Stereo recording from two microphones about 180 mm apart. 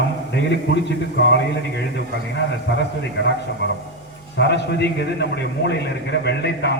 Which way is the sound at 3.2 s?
75° left (ahead or behind).